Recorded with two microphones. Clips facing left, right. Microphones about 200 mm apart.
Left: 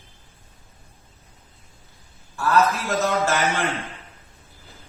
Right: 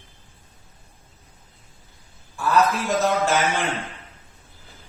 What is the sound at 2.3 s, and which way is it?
A man's voice, 15° right (ahead or behind).